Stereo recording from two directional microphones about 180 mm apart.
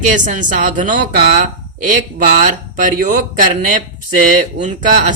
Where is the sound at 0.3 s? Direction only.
45° right (ahead or behind).